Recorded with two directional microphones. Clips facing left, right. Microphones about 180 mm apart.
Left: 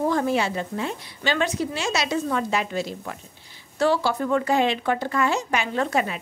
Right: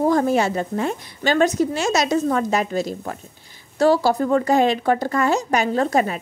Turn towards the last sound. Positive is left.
turn(degrees=-40)  # may be behind; listen again after turning